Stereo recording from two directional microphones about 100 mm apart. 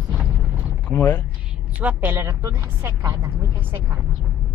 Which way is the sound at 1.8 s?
15° right (ahead or behind).